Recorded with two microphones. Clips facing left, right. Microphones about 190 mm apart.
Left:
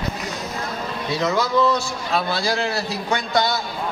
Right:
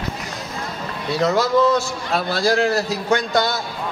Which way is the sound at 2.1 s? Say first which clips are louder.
Right 4 dB; 45° right (ahead or behind).